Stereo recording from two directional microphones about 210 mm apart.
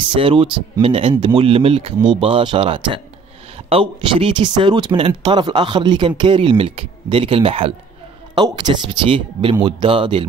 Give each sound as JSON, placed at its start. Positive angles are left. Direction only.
{"t": 0.1, "sound": "speech", "side_deg": -25}